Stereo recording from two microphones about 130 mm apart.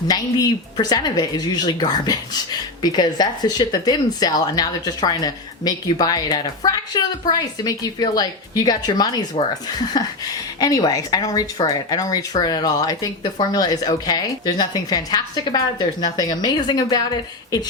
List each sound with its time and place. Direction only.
0.1 s speech: 30° left (ahead or behind)